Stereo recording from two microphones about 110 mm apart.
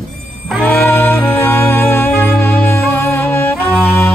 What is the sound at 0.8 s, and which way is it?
Music, 20° left (ahead or behind).